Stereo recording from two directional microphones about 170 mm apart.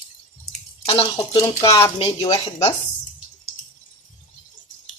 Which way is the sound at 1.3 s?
20° left (ahead or behind).